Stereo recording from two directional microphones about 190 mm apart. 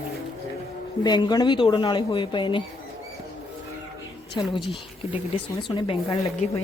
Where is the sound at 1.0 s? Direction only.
20° left (ahead or behind).